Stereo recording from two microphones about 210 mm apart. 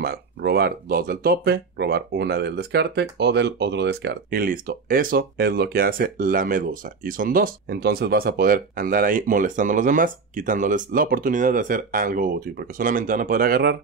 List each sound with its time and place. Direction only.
0.0 s speech: 50° right (ahead or behind)